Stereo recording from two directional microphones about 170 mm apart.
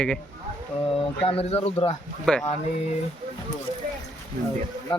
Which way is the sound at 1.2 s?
35° left (ahead or behind).